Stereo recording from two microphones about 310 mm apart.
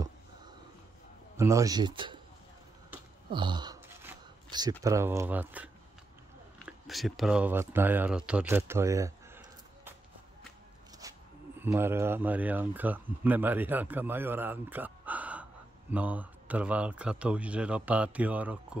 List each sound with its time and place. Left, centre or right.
1.3 s a man's voice: centre
3.3 s speech: centre
6.9 s speech: centre
11.6 s speech: centre